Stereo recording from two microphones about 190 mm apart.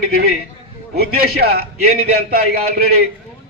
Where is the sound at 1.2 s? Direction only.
55° right (ahead or behind).